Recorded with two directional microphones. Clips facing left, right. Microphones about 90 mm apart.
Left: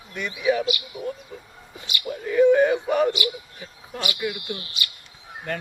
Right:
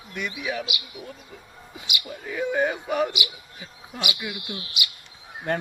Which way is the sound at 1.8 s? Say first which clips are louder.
Even; 15° right (ahead or behind).